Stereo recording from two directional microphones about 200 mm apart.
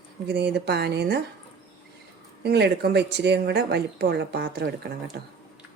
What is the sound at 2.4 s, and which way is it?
A woman's voice, 55° right (ahead or behind).